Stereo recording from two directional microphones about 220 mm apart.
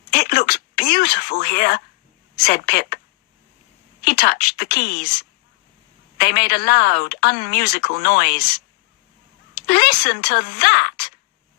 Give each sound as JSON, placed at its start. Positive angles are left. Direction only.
{"t": 0.1, "sound": "speech", "side_deg": 45}
{"t": 4.0, "sound": "speech", "side_deg": 45}